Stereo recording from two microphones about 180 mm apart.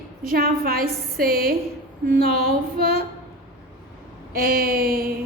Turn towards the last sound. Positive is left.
turn(degrees=-55)  # may be behind; listen again after turning